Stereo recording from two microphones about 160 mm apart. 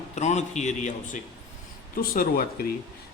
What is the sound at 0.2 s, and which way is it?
A man's voice, 45° left (ahead or behind).